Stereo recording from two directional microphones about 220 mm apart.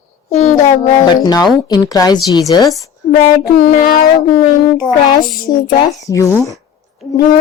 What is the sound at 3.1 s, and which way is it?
Speech, 45° left (ahead or behind).